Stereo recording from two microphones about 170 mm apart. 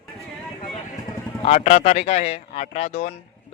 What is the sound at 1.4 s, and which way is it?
Speech, 40° left (ahead or behind).